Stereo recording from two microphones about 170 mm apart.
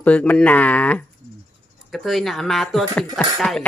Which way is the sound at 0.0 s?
10° left (ahead or behind).